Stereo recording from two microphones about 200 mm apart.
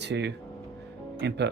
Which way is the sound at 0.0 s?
60° right (ahead or behind).